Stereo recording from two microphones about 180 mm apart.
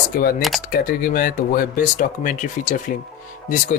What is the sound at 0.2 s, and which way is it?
Speech, 60° left (ahead or behind).